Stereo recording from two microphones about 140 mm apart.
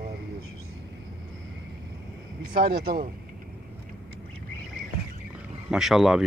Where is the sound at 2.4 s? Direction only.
90° right.